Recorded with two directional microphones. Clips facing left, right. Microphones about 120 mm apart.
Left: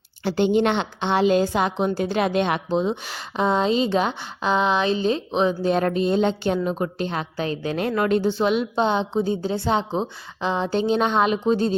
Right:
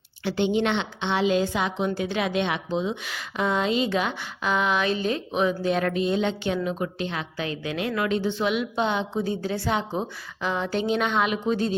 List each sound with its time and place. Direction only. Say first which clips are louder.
0.3 s a woman's voice: left 4 dB; 45° left (ahead or behind)